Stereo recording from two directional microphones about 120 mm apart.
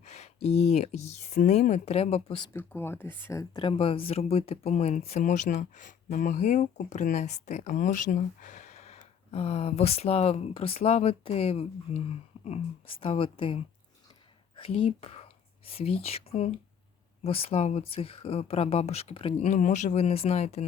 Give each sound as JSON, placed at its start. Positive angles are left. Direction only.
{"t": 0.0, "sound": "speech", "side_deg": 70}
{"t": 2.5, "sound": "speech", "side_deg": 20}
{"t": 3.5, "sound": "speech", "side_deg": 45}
{"t": 9.3, "sound": "speech", "side_deg": 55}
{"t": 19.5, "sound": "speech", "side_deg": 90}